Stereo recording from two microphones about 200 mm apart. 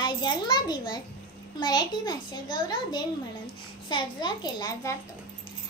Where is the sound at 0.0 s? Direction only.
20° left (ahead or behind).